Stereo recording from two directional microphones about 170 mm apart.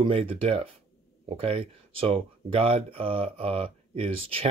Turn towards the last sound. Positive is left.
turn(degrees=-35)  # may be behind; listen again after turning